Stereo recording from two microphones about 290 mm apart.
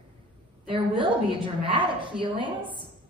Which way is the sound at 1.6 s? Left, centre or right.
Centre.